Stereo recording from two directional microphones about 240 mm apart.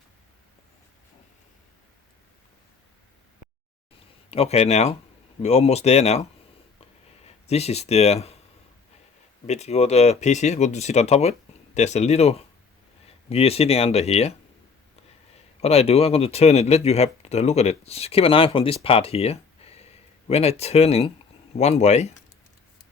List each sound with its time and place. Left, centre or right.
4.3 s speech: left
7.3 s speech: left
9.5 s speech: left
15.6 s speech: left